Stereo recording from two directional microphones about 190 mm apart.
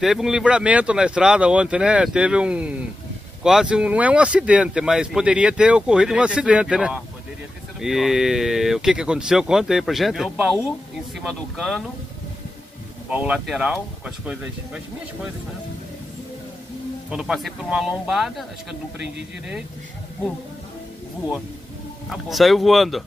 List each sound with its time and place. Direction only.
0.0 s speech: centre (ahead or behind)
13.1 s speech: 5° right (ahead or behind)
17.1 s speech: 5° right (ahead or behind)
22.1 s speech: centre (ahead or behind)